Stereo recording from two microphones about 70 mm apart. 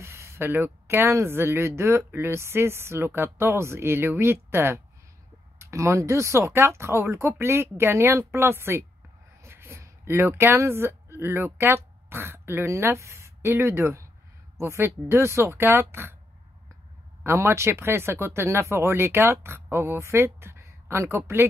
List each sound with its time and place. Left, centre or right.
0.0 s speech: right
9.4 s a sound: right
11.1 s speech: right
17.2 s speech: right